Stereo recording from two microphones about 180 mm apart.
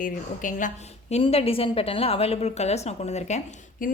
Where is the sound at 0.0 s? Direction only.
45° left (ahead or behind).